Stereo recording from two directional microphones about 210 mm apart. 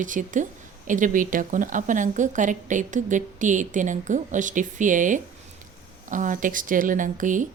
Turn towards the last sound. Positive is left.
turn(degrees=-40)  # may be behind; listen again after turning